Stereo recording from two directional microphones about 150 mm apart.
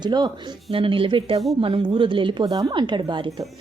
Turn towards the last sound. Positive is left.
turn(degrees=-30)  # may be behind; listen again after turning